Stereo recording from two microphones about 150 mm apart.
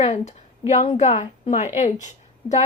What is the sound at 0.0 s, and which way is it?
A woman's voice, 50° left (ahead or behind).